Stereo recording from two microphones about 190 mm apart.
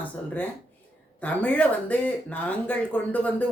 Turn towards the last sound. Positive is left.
turn(degrees=10)  # may be behind; listen again after turning